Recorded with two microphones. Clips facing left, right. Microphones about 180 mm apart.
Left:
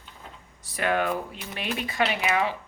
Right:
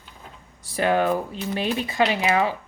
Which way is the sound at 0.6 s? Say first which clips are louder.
Right 5 dB; 30° right (ahead or behind).